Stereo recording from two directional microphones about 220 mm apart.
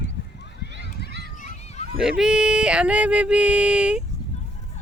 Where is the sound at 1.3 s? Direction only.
35° left (ahead or behind).